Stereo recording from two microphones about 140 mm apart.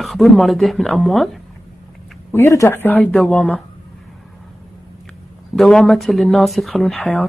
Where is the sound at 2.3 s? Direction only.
20° left (ahead or behind).